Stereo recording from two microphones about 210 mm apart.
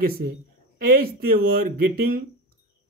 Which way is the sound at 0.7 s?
45° right (ahead or behind).